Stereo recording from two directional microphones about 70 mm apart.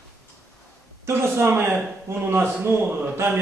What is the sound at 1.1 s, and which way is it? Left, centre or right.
A man's voice, right.